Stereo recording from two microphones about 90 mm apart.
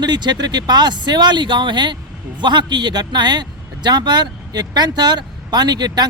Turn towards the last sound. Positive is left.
turn(degrees=-50)  # may be behind; listen again after turning